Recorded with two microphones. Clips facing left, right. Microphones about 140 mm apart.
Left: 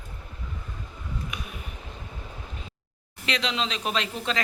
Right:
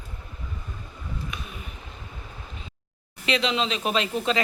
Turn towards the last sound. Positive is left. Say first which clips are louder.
# right 4 dB
turn(degrees=-5)  # may be behind; listen again after turning